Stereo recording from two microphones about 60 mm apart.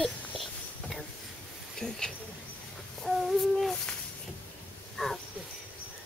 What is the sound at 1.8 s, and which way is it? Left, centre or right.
Speech, centre.